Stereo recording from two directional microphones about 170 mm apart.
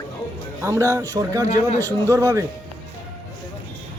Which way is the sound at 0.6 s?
15° right (ahead or behind).